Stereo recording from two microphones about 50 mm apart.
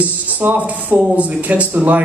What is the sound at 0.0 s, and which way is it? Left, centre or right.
A man's voice, right.